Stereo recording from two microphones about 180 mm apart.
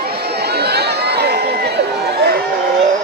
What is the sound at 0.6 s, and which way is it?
Crowd, 65° right (ahead or behind).